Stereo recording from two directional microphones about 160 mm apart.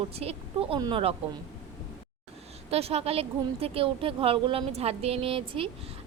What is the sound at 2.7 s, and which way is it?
Speech, 40° right (ahead or behind).